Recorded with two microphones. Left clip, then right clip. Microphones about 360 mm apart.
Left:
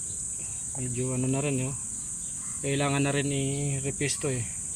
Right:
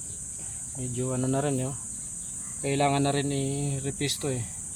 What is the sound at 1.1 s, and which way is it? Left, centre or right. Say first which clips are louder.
Speech: right 3 dB; centre.